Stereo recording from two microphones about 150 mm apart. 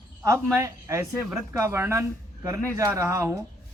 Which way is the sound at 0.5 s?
20° right (ahead or behind).